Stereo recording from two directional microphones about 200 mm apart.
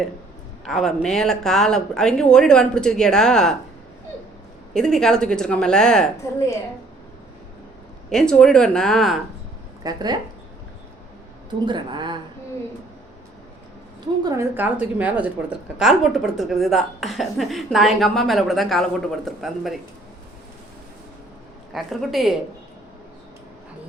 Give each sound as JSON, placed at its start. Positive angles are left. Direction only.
{"t": 0.6, "sound": "a woman's voice", "side_deg": 0}
{"t": 4.7, "sound": "a woman's voice", "side_deg": 5}
{"t": 8.1, "sound": "a woman's voice", "side_deg": 5}
{"t": 9.8, "sound": "a woman's voice", "side_deg": -20}
{"t": 11.6, "sound": "a woman's voice", "side_deg": -25}
{"t": 14.3, "sound": "a woman's voice", "side_deg": -10}
{"t": 21.7, "sound": "a woman's voice", "side_deg": 0}